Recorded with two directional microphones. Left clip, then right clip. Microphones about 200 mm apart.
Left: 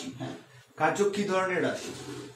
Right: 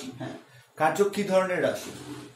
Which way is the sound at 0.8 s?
55° right (ahead or behind).